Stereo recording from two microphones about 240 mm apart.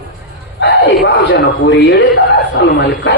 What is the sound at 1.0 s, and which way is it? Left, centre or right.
A man's voice, left.